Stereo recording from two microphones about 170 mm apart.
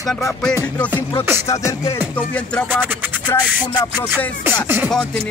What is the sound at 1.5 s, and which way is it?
Music, 20° left (ahead or behind).